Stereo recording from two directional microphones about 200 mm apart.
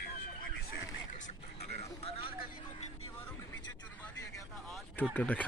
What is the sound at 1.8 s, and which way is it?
Vehicle, 30° left (ahead or behind).